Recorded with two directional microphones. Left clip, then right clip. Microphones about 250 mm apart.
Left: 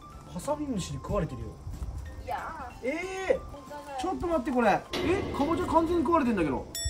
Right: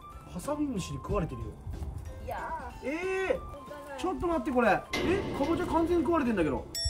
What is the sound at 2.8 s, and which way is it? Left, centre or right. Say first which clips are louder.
Speech: even; centre.